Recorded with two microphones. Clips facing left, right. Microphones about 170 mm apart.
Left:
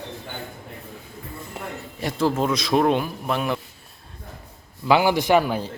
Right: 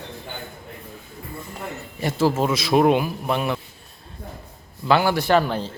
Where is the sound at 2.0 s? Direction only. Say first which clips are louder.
Right 2 dB; 5° right (ahead or behind).